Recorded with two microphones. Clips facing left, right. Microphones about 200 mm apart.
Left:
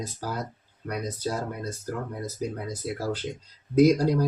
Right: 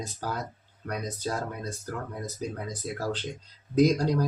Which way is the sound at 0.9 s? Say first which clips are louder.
Left 2 dB; 5° left (ahead or behind).